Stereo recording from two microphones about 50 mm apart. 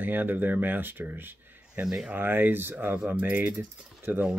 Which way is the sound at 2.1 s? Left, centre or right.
Right.